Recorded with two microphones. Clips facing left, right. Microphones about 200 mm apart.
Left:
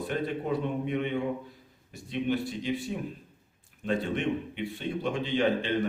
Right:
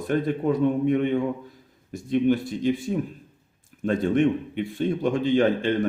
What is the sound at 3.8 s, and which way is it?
Speech, 45° right (ahead or behind).